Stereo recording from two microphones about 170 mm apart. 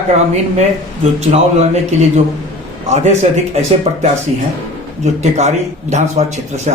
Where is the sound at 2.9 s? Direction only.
40° right (ahead or behind).